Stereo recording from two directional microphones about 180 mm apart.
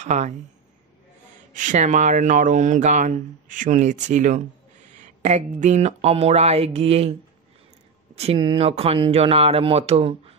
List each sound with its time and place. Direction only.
0.0 s speech: 40° right (ahead or behind)
1.5 s speech: 45° right (ahead or behind)
8.2 s speech: 30° right (ahead or behind)